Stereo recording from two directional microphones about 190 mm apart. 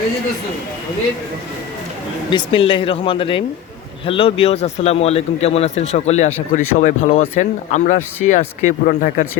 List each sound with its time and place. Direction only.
2.3 s speech: 30° left (ahead or behind); by 9.2 s 45° left (ahead or behind)